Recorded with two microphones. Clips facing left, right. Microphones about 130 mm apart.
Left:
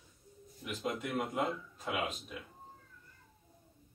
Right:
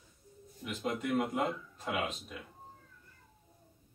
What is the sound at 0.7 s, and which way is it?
Speech, centre (ahead or behind).